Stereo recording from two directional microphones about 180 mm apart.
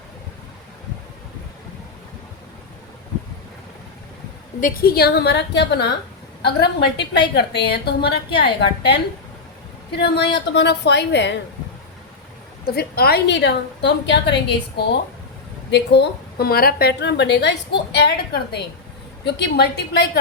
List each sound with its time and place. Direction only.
4.6 s a woman's voice: 55° left (ahead or behind); by 11.3 s 75° left (ahead or behind)
12.6 s a woman's voice: 60° left (ahead or behind)